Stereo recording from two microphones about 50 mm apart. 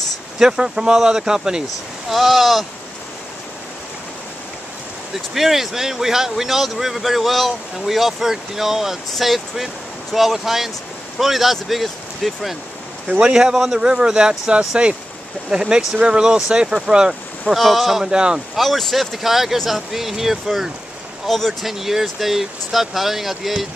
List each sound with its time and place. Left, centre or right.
0.4 s speech: centre
2.0 s speech: centre
5.3 s speech: centre
13.2 s speech: centre
17.6 s speech: centre
18.1 s speech: centre
18.6 s speech: centre
21.3 s speech: centre
21.6 s speech: centre